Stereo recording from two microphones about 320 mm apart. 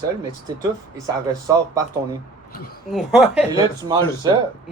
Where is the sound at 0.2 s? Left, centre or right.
Centre.